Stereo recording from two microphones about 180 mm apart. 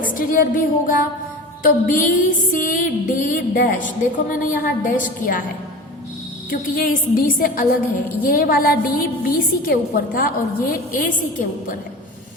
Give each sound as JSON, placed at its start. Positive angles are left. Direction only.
{"t": 0.0, "sound": "music", "side_deg": 50}
{"t": 6.5, "sound": "music", "side_deg": 55}
{"t": 8.2, "sound": "a woman's voice", "side_deg": 55}